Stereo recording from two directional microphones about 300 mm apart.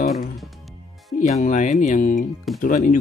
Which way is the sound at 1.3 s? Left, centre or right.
Left.